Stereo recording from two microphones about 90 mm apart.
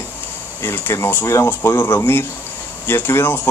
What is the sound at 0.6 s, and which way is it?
Speech, 25° left (ahead or behind).